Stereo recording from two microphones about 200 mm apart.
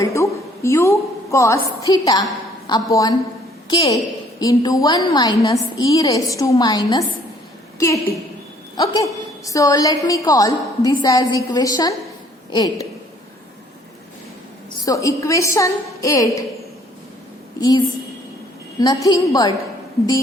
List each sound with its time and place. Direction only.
0.0 s a woman's voice: 15° left (ahead or behind)
14.8 s a woman's voice: 15° left (ahead or behind)
17.6 s a woman's voice: 20° left (ahead or behind)